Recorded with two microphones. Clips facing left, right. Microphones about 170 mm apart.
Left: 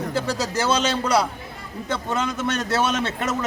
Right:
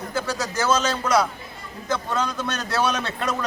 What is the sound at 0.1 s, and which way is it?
A man's voice, 30° left (ahead or behind).